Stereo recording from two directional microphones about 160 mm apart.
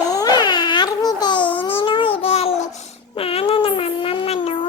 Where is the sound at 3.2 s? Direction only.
35° left (ahead or behind).